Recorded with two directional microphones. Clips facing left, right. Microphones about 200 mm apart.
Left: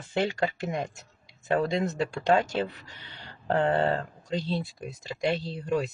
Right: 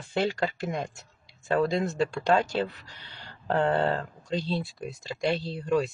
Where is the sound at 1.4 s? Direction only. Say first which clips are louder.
Right 1 dB; 20° left (ahead or behind).